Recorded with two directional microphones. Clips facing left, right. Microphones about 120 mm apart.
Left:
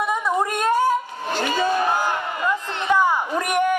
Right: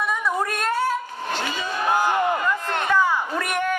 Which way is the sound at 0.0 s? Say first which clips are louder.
Left 3 dB; 20° left (ahead or behind).